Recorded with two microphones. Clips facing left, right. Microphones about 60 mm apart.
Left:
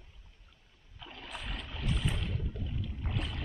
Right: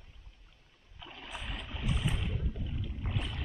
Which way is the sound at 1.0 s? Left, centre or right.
Centre.